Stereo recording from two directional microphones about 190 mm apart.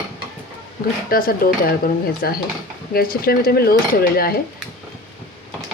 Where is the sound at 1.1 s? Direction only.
50° left (ahead or behind).